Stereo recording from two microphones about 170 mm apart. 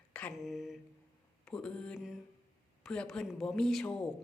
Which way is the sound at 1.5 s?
5° left (ahead or behind).